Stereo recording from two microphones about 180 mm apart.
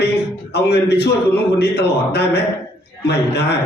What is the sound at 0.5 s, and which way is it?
A man's voice, 65° left (ahead or behind).